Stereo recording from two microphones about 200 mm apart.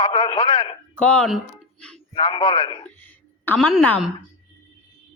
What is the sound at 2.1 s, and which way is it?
Speech, 25° left (ahead or behind).